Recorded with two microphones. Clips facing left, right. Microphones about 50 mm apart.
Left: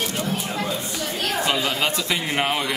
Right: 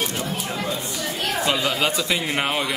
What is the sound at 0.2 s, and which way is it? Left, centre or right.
Chatter, centre.